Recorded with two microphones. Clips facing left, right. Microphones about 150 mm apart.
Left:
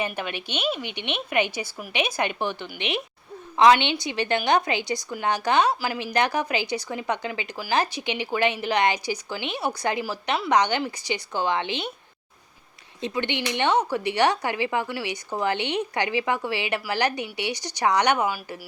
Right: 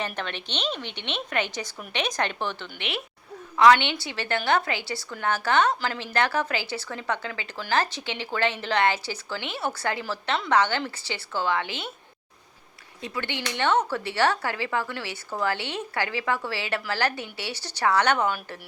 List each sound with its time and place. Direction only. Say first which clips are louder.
0.0 s speech: left 3 dB; 10° left (ahead or behind)
13.0 s speech: left 5 dB; 20° left (ahead or behind)